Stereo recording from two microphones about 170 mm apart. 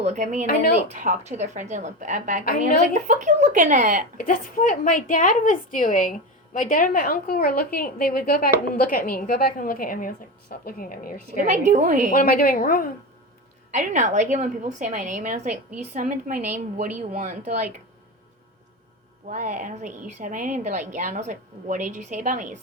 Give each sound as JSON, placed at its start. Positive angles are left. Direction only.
{"t": 0.0, "sound": "a woman's voice", "side_deg": -45}
{"t": 2.4, "sound": "a woman's voice", "side_deg": 60}
{"t": 2.9, "sound": "a woman's voice", "side_deg": -45}
{"t": 4.2, "sound": "a woman's voice", "side_deg": 55}
{"t": 11.4, "sound": "a woman's voice", "side_deg": -45}
{"t": 12.1, "sound": "a woman's voice", "side_deg": 60}
{"t": 13.7, "sound": "a woman's voice", "side_deg": -45}
{"t": 19.3, "sound": "a woman's voice", "side_deg": -50}